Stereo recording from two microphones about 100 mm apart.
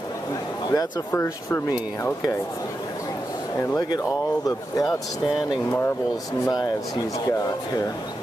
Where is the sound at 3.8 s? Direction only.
40° left (ahead or behind).